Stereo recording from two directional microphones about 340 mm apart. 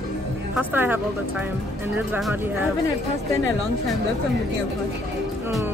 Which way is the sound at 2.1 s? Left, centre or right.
Centre.